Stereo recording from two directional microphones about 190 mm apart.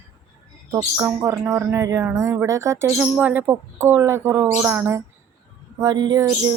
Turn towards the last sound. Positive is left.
turn(degrees=-20)  # may be behind; listen again after turning